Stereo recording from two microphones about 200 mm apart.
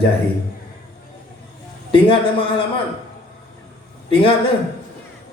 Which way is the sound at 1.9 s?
25° left (ahead or behind).